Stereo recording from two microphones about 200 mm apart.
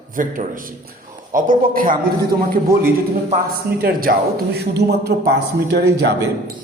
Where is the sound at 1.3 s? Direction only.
45° right (ahead or behind).